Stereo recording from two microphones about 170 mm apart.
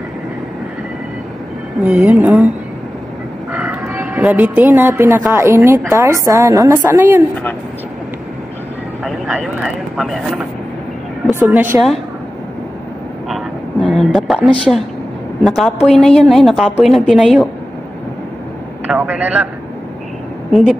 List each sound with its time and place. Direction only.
1.9 s a woman's voice: 5° right (ahead or behind)
3.5 s a woman's voice: 15° right (ahead or behind)
9.0 s speech: centre (ahead or behind)
11.3 s a woman's voice: 10° right (ahead or behind)
13.3 s a sound: 5° left (ahead or behind)
15.4 s speech: centre (ahead or behind)
18.9 s a woman's voice: 10° right (ahead or behind)